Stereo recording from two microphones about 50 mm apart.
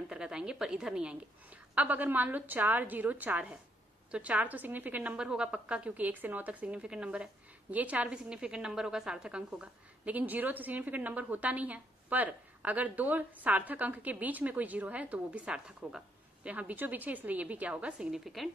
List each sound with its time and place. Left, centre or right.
0.1 s a woman's voice: centre
1.8 s a woman's voice: right
5.1 s a woman's voice: centre
6.8 s a woman's voice: centre
7.7 s a woman's voice: right
8.1 s a woman's voice: centre
10.0 s a woman's voice: right; by 16.0 s centre
16.4 s a woman's voice: right
18.2 s a woman's voice: centre